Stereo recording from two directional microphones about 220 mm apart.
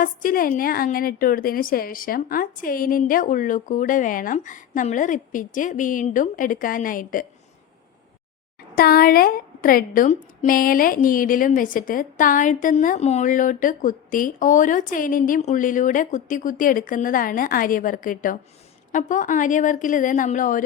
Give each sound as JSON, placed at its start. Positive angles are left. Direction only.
{"t": 0.0, "sound": "a woman's voice", "side_deg": 40}
{"t": 8.7, "sound": "a woman's voice", "side_deg": 45}